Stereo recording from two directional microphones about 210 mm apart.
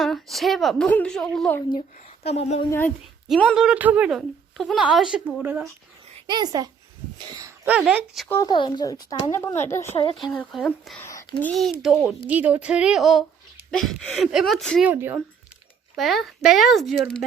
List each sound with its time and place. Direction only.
0.0 s a woman's voice: centre (ahead or behind)
2.2 s speech: 30° left (ahead or behind)
2.6 s a woman's voice: 10° left (ahead or behind); by 5.6 s 10° right (ahead or behind)
6.2 s a child's voice: 20° right (ahead or behind)
7.8 s a woman's voice: centre (ahead or behind)
8.3 s a woman's voice: 15° left (ahead or behind)
11.1 s a sound: 15° left (ahead or behind)
11.5 s a woman's voice: centre (ahead or behind)